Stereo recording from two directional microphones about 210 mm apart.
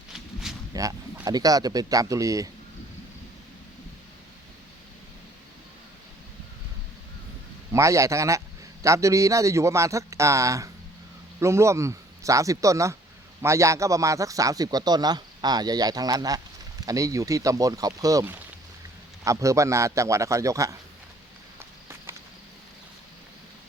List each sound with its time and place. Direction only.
0.1 s a sound: centre (ahead or behind)
0.7 s a man's voice: 15° right (ahead or behind)
7.7 s a man's voice: 15° right (ahead or behind)